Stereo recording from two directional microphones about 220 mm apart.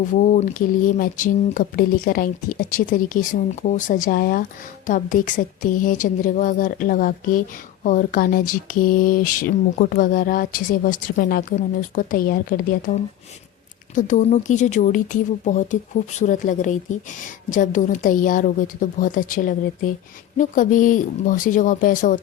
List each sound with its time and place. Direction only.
0.1 s speech: 35° left (ahead or behind)